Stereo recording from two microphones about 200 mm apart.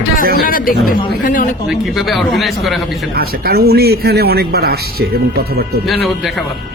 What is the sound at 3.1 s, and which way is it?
A man's voice, 50° right (ahead or behind).